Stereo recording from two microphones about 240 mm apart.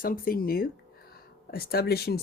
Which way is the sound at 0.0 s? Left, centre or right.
Left.